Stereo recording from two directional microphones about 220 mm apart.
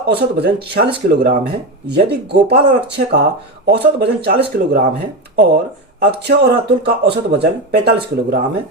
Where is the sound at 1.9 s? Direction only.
50° right (ahead or behind).